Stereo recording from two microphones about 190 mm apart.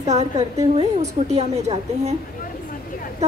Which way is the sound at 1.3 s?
35° right (ahead or behind).